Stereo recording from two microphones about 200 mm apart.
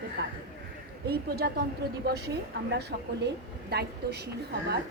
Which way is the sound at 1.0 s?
50° right (ahead or behind).